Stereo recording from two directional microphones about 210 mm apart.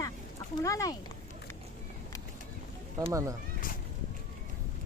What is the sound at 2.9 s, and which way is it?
Speech, 15° right (ahead or behind).